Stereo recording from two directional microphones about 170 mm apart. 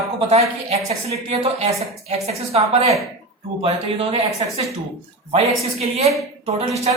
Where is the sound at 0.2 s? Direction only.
40° right (ahead or behind).